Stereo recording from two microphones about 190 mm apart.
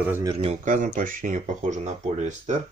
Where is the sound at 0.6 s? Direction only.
45° right (ahead or behind).